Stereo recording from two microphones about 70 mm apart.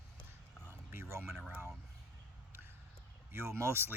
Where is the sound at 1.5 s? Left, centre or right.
Right.